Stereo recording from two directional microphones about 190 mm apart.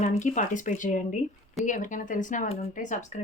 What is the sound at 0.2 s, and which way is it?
Speech, 40° left (ahead or behind).